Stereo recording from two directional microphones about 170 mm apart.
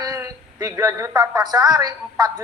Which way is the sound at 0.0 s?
20° right (ahead or behind).